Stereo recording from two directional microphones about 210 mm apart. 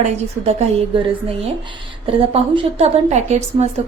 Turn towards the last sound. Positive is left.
turn(degrees=-30)  # may be behind; listen again after turning